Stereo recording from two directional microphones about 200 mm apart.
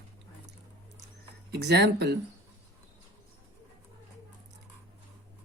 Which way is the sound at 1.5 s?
55° right (ahead or behind).